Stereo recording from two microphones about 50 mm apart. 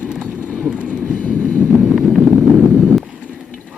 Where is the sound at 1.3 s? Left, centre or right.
Left.